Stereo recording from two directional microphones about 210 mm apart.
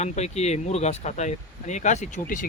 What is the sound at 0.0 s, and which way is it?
Speech, 30° left (ahead or behind).